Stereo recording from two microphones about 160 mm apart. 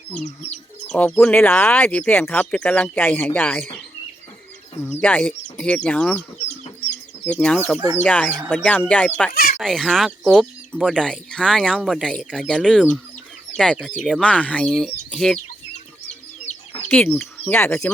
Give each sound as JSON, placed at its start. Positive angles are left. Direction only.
{"t": 0.9, "sound": "speech", "side_deg": 10}
{"t": 4.8, "sound": "speech", "side_deg": 10}
{"t": 6.9, "sound": "chicken", "side_deg": 5}
{"t": 7.9, "sound": "speech", "side_deg": 10}
{"t": 9.3, "sound": "speech", "side_deg": 65}
{"t": 9.6, "sound": "speech", "side_deg": 0}
{"t": 13.8, "sound": "speech", "side_deg": 5}
{"t": 16.0, "sound": "chicken", "side_deg": 40}
{"t": 17.1, "sound": "speech", "side_deg": 5}